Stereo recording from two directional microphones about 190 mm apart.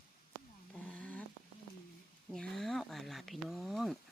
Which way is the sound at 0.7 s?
5° left (ahead or behind).